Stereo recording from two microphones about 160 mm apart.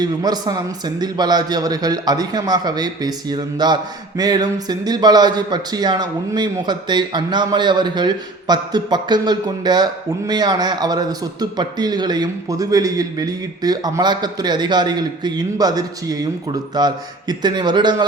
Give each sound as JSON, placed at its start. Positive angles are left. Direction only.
{"t": 0.0, "sound": "speech", "side_deg": -25}